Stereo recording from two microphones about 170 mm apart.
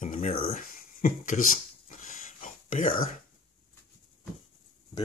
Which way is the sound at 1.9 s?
45° left (ahead or behind).